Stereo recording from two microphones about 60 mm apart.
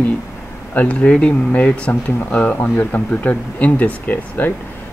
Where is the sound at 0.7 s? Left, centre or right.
Left.